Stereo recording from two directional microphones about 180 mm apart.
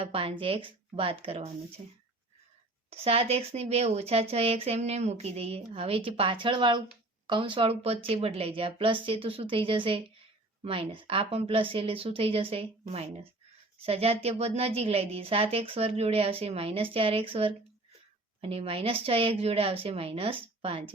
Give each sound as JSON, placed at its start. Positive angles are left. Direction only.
{"t": 0.0, "sound": "speech", "side_deg": -30}
{"t": 2.9, "sound": "speech", "side_deg": -35}